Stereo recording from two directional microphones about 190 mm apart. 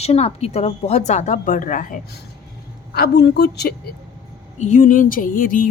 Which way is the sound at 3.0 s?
60° left (ahead or behind).